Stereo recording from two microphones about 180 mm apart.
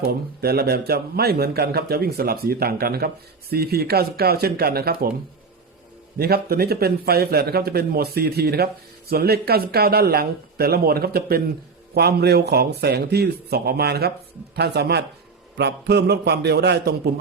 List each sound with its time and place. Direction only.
0.4 s a man's voice: 60° right (ahead or behind)
6.1 s a man's voice: 60° right (ahead or behind)